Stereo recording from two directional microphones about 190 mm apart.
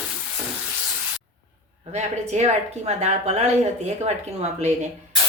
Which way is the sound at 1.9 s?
35° right (ahead or behind).